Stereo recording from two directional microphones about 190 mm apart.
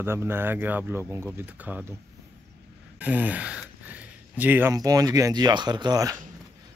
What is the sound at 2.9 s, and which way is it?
Speech, 10° right (ahead or behind).